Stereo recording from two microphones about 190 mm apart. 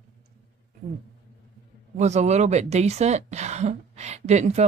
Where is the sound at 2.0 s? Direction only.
35° right (ahead or behind).